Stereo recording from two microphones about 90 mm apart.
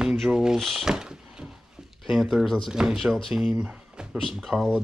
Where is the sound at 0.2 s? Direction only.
5° right (ahead or behind).